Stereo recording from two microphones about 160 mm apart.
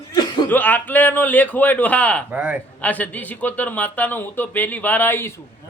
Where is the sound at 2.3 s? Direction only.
10° right (ahead or behind).